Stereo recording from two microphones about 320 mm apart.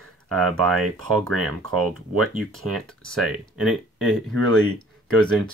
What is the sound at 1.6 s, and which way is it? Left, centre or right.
Speech, right.